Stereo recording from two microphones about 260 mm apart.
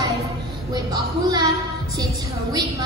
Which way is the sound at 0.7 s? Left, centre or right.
Centre.